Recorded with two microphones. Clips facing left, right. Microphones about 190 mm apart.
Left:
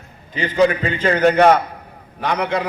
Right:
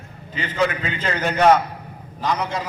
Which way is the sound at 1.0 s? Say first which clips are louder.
Left 5 dB; 55° left (ahead or behind).